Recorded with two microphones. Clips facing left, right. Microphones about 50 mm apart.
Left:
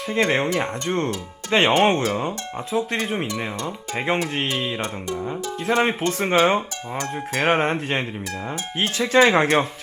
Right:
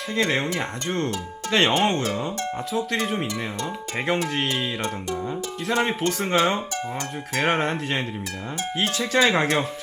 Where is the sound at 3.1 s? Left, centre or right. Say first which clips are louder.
Left 1 dB; left.